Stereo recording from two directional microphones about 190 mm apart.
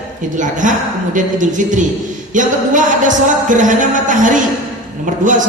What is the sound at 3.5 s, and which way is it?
Speech, 40° right (ahead or behind).